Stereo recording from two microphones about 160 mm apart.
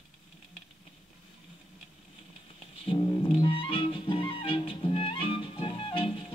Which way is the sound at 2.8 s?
35° left (ahead or behind).